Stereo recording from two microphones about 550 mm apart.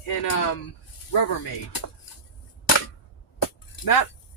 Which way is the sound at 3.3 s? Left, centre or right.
Left.